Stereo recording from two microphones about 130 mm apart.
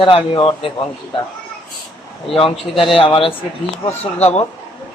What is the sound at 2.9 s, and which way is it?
A man's voice, 45° left (ahead or behind).